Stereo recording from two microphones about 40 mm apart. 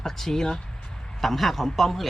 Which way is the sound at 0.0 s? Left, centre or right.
Centre.